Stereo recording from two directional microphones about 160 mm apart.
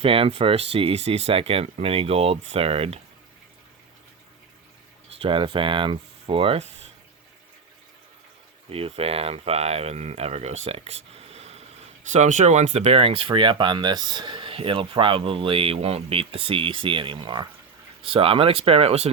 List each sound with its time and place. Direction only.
0.0 s speech: 35° right (ahead or behind)
5.2 s speech: 35° right (ahead or behind)
8.7 s speech: 40° right (ahead or behind)